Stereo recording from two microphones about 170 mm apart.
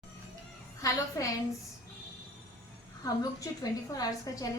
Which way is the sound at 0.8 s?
20° left (ahead or behind).